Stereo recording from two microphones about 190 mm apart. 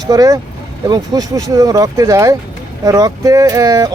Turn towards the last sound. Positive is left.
turn(degrees=-20)  # may be behind; listen again after turning